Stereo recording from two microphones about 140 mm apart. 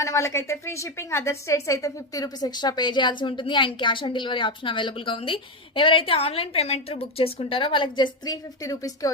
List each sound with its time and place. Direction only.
0.0 s a woman's voice: 20° left (ahead or behind)